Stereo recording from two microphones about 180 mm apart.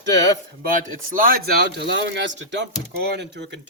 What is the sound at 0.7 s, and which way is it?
Speech, 50° right (ahead or behind).